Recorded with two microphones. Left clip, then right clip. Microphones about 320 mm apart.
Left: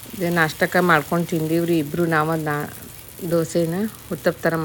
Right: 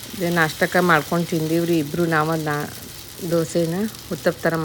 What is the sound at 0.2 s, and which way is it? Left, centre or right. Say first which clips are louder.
Speech: even; centre.